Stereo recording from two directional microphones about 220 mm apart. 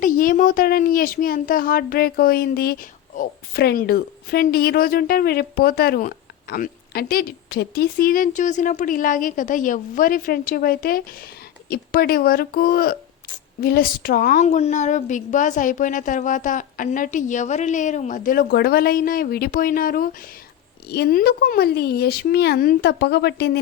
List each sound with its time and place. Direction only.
0.0 s speech: 40° left (ahead or behind)